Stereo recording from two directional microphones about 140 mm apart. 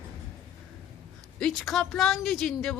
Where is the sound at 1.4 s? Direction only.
Centre (ahead or behind).